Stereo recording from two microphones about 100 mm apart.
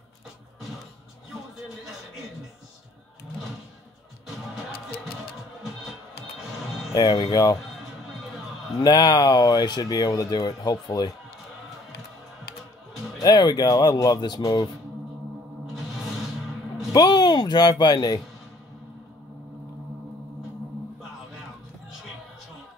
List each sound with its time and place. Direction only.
6.9 s speech: 40° left (ahead or behind)
8.8 s speech: 40° left (ahead or behind)
13.2 s speech: 45° left (ahead or behind)
16.9 s speech: 45° left (ahead or behind)